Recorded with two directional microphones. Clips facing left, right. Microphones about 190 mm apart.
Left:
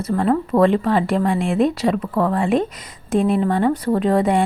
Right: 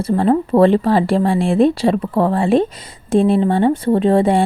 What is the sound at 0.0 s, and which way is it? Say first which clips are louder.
Speech: right 4 dB; 30° right (ahead or behind).